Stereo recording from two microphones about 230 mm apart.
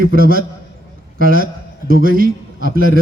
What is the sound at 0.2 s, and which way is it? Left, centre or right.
Speech, right.